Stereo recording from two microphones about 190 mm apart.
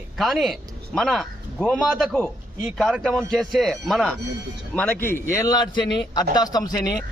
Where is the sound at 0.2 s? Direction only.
Centre (ahead or behind).